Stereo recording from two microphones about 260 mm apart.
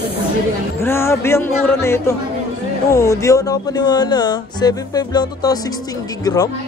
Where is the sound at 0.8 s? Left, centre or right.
Centre.